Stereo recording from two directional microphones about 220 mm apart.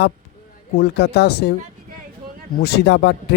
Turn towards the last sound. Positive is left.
turn(degrees=50)  # may be behind; listen again after turning